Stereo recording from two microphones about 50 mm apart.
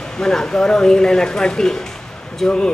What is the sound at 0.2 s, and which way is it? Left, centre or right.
Speech, centre.